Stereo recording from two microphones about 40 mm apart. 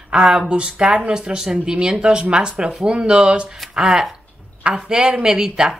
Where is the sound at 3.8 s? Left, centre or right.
Centre.